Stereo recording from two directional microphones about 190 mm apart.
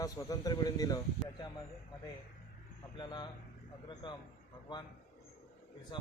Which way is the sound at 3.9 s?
25° left (ahead or behind).